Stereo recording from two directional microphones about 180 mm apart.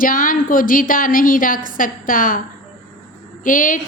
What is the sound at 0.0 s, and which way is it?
A woman's voice, 50° left (ahead or behind).